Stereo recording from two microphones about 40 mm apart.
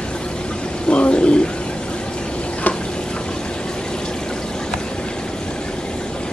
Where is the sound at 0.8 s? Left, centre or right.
Left.